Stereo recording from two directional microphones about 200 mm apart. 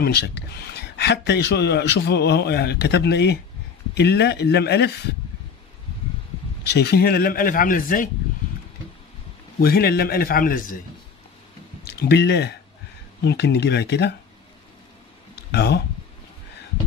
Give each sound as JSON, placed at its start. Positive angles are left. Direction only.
{"t": 0.0, "sound": "speech", "side_deg": 55}
{"t": 6.6, "sound": "speech", "side_deg": 55}
{"t": 9.6, "sound": "speech", "side_deg": 50}
{"t": 11.8, "sound": "speech", "side_deg": 55}
{"t": 15.3, "sound": "a sound", "side_deg": 55}